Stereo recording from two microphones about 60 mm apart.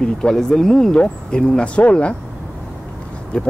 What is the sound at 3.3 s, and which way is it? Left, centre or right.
Speech, centre.